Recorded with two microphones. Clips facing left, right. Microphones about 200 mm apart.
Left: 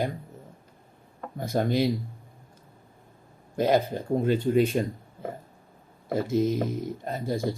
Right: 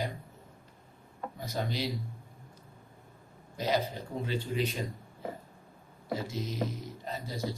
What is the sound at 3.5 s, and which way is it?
Speech, 50° left (ahead or behind).